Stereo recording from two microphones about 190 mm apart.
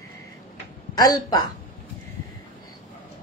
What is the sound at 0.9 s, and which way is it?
Speech, 20° left (ahead or behind).